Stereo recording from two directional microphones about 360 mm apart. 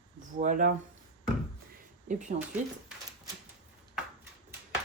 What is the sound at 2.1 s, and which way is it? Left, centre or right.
Speech, centre.